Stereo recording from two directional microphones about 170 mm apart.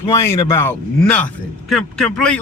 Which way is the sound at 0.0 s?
15° left (ahead or behind).